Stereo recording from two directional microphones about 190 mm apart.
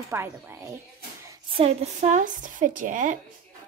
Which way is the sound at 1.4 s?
30° right (ahead or behind).